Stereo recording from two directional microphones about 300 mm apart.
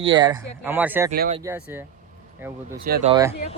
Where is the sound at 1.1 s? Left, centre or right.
Right.